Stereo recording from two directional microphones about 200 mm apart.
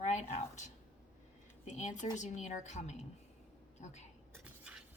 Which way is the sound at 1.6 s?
40° left (ahead or behind).